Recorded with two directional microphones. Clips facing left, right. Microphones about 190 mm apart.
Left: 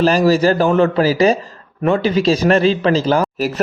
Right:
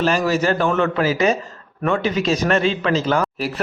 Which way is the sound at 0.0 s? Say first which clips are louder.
Left 6 dB; 35° left (ahead or behind).